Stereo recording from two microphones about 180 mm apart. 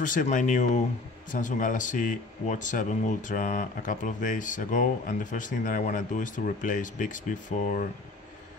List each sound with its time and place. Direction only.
0.0 s speech: 45° left (ahead or behind)